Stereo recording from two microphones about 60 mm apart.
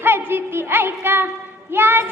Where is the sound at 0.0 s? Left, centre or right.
Right.